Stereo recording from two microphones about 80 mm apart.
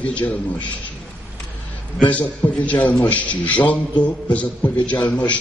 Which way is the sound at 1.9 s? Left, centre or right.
Centre.